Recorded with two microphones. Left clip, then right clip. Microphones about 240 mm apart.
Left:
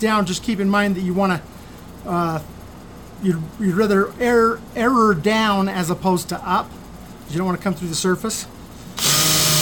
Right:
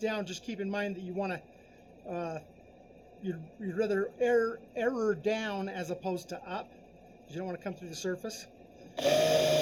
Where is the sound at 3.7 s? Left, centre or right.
Left.